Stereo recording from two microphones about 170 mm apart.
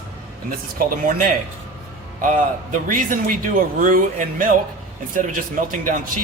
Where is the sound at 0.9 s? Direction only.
55° right (ahead or behind).